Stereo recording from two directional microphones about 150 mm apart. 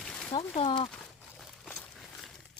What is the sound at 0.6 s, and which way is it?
Speech, 35° left (ahead or behind).